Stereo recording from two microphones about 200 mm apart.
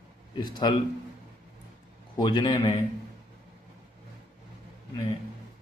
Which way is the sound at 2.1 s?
20° left (ahead or behind).